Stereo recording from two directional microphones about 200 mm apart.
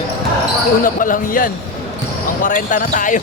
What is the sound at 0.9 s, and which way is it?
Speech, 40° left (ahead or behind).